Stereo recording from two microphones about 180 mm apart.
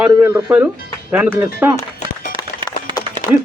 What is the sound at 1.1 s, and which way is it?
Speech, 10° right (ahead or behind).